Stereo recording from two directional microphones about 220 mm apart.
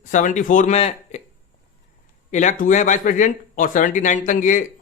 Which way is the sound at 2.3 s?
35° left (ahead or behind).